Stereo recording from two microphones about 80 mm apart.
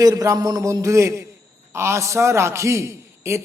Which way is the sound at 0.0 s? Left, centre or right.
Right.